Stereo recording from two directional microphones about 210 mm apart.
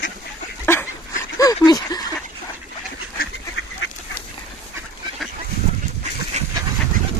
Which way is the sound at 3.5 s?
60° left (ahead or behind).